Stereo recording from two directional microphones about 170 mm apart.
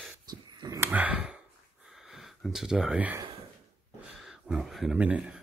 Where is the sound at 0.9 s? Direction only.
10° right (ahead or behind).